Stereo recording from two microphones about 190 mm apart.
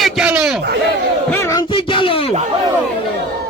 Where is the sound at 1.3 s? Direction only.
15° left (ahead or behind).